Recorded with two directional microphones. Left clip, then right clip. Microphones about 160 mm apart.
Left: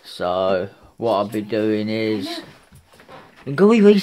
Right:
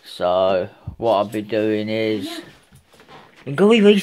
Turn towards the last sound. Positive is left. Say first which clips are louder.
# even
turn(degrees=15)  # may be behind; listen again after turning